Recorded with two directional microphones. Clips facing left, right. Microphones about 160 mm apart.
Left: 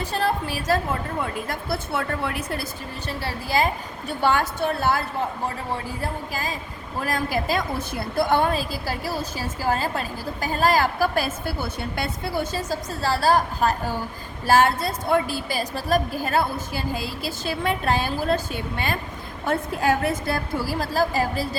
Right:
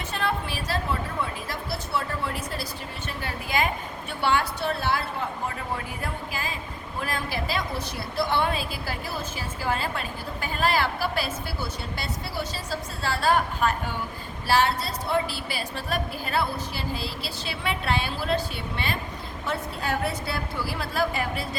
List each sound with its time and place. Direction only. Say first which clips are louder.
0.1 s a woman's voice: left 3 dB; 35° left (ahead or behind); by 2.6 s 60° left (ahead or behind)
3.1 s a woman's voice: left 5 dB; 35° left (ahead or behind)